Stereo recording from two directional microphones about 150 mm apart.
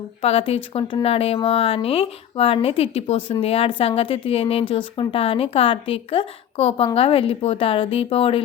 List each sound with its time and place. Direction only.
0.2 s speech: 40° left (ahead or behind)